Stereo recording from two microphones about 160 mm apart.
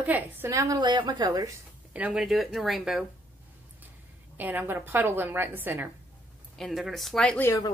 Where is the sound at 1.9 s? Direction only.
5° right (ahead or behind).